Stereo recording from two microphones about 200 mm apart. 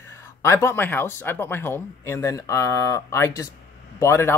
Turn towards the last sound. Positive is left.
turn(degrees=15)  # may be behind; listen again after turning